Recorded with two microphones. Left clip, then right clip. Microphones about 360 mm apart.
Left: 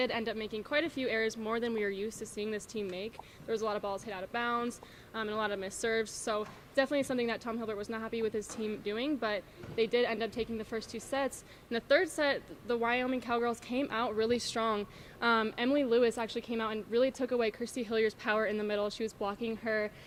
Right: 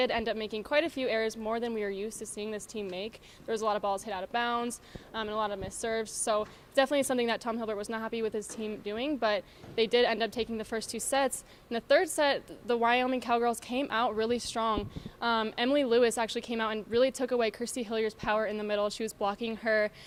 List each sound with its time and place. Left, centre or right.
0.0 s a woman's voice: right